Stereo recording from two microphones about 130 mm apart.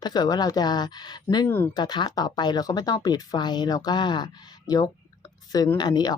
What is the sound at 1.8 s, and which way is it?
Speech, 35° left (ahead or behind).